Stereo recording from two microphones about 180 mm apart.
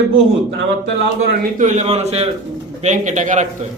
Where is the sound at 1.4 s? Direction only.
45° right (ahead or behind).